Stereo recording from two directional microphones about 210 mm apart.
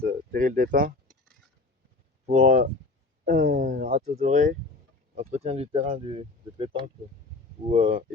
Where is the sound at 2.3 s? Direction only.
35° right (ahead or behind).